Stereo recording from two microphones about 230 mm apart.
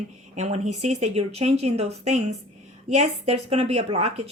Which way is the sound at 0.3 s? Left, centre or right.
Right.